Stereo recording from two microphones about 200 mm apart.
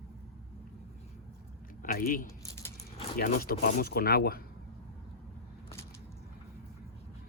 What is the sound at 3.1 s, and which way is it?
Speech, 45° left (ahead or behind).